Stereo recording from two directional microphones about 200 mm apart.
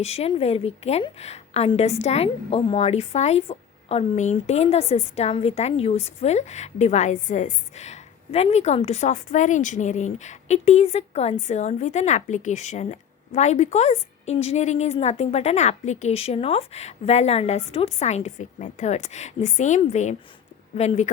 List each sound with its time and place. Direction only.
0.0 s a woman's voice: 30° left (ahead or behind)